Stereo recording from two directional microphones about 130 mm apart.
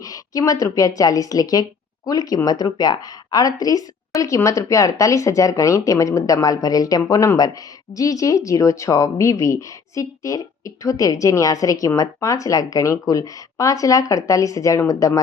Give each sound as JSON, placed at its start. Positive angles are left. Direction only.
{"t": 0.0, "sound": "speech", "side_deg": 25}